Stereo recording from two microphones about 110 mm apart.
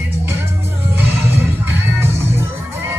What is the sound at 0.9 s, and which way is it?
Music, 20° right (ahead or behind).